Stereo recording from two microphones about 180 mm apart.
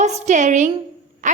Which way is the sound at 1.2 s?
45° right (ahead or behind).